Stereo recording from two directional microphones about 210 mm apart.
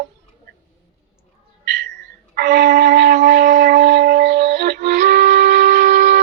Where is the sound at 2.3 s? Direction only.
45° right (ahead or behind).